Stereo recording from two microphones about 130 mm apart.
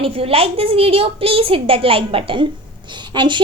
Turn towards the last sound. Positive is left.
turn(degrees=-35)  # may be behind; listen again after turning